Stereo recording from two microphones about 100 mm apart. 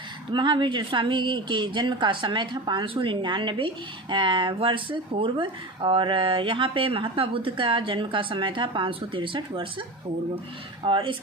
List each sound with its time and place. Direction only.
0.3 s a woman's voice: 50° right (ahead or behind)
10.8 s speech: 60° right (ahead or behind)